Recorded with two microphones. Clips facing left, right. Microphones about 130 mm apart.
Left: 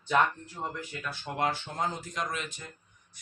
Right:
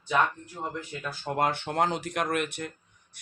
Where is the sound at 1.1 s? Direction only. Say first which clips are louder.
Right 3 dB; 50° right (ahead or behind); by 2.7 s 65° right (ahead or behind).